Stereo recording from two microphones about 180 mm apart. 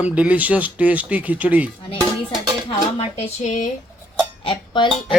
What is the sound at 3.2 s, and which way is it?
Speech, 40° left (ahead or behind).